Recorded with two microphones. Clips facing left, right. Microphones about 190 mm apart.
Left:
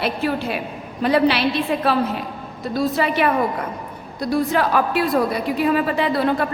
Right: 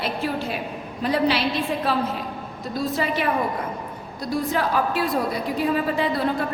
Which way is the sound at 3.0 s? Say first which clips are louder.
Left 4 dB; 70° left (ahead or behind).